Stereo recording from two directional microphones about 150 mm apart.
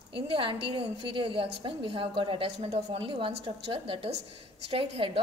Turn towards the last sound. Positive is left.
turn(degrees=-40)  # may be behind; listen again after turning